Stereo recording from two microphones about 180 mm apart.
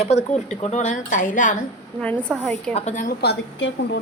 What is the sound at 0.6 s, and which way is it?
Speech, 40° left (ahead or behind).